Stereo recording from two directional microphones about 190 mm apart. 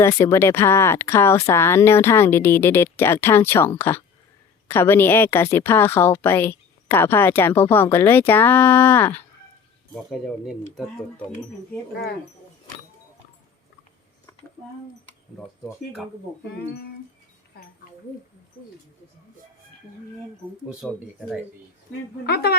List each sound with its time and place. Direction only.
0.0 s speech: 15° left (ahead or behind)
15.7 s speech: centre (ahead or behind)
20.8 s speech: 5° right (ahead or behind)
22.3 s a woman's voice: 55° left (ahead or behind)